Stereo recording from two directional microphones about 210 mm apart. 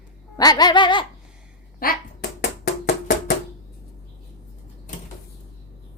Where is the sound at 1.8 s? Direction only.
45° left (ahead or behind).